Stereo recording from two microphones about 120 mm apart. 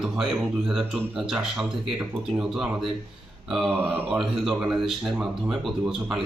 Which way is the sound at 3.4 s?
5° right (ahead or behind).